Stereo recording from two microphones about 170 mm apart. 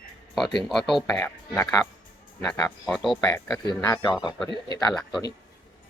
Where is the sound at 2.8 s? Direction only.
Centre (ahead or behind).